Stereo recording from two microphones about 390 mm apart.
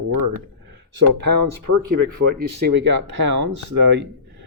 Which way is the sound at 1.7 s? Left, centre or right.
Right.